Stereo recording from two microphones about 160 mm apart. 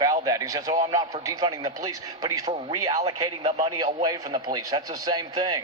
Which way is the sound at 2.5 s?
40° right (ahead or behind).